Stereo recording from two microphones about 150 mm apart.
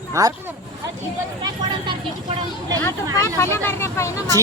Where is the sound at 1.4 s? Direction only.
30° right (ahead or behind).